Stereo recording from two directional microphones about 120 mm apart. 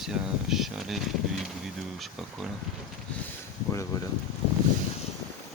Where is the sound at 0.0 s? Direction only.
Centre (ahead or behind).